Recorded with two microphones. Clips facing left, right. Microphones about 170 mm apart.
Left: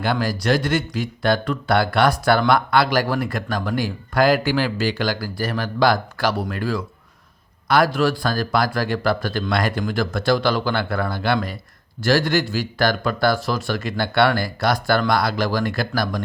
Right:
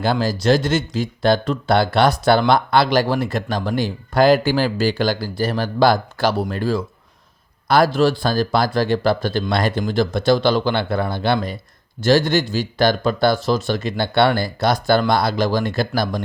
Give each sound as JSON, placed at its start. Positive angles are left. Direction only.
{"t": 0.0, "sound": "speech", "side_deg": -25}